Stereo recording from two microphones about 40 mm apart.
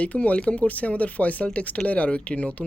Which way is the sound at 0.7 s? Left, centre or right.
Left.